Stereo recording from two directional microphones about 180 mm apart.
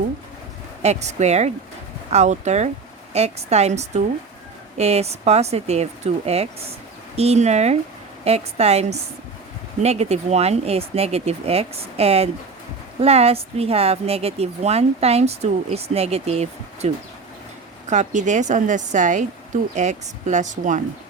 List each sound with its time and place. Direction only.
0.8 s a woman's voice: 40° right (ahead or behind)